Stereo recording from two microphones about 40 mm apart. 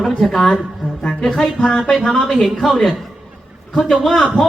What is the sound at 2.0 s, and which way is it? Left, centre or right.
Speech, centre.